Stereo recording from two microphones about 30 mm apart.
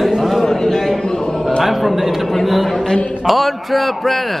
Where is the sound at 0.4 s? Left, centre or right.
Centre.